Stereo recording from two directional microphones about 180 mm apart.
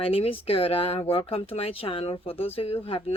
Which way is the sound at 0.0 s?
30° left (ahead or behind).